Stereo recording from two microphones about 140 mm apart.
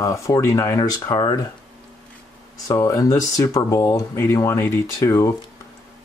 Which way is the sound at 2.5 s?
25° left (ahead or behind).